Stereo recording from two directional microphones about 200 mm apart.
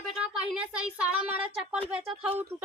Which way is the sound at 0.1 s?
5° right (ahead or behind).